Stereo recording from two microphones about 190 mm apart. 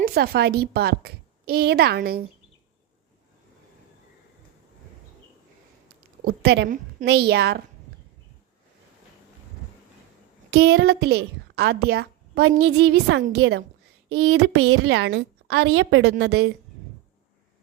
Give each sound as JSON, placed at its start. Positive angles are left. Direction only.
{"t": 0.0, "sound": "a woman's voice", "side_deg": -55}
{"t": 6.2, "sound": "a woman's voice", "side_deg": -60}
{"t": 10.5, "sound": "a woman's voice", "side_deg": -60}
{"t": 14.2, "sound": "a woman's voice", "side_deg": -90}